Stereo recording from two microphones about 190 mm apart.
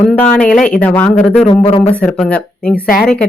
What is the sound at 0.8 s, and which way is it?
Speech, 10° left (ahead or behind).